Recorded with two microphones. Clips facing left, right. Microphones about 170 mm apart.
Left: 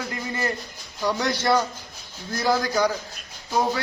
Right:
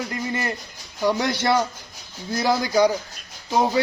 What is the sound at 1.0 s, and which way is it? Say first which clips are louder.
A man's voice: right 3 dB; 15° right (ahead or behind).